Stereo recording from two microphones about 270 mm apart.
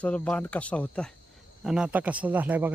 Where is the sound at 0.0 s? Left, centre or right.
Centre.